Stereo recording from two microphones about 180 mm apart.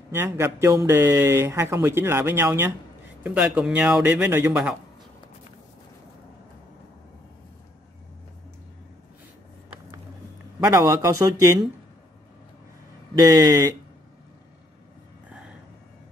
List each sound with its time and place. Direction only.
0.1 s a man's voice: 15° right (ahead or behind)
10.6 s a man's voice: 15° right (ahead or behind)
13.2 s a man's voice: 20° right (ahead or behind)